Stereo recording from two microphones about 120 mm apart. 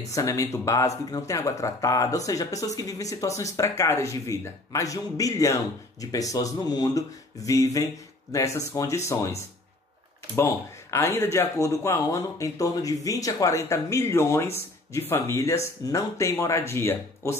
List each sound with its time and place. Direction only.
0.1 s speech: 25° left (ahead or behind)